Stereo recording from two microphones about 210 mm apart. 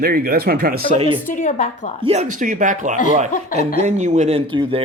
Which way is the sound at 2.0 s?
30° right (ahead or behind).